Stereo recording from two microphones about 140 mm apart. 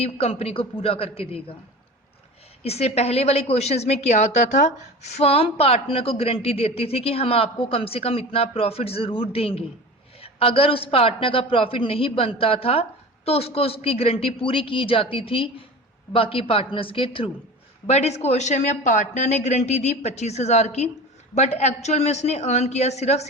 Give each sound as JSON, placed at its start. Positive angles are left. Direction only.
{"t": 0.0, "sound": "a woman's voice", "side_deg": 45}
{"t": 2.6, "sound": "a woman's voice", "side_deg": 50}
{"t": 17.8, "sound": "a woman's voice", "side_deg": 50}